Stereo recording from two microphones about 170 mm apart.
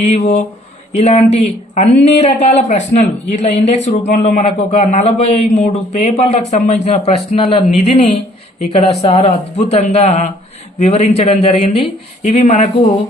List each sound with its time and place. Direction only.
0.0 s speech: 45° left (ahead or behind)